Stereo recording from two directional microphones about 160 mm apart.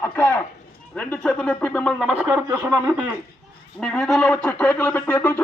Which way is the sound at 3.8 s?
Centre (ahead or behind).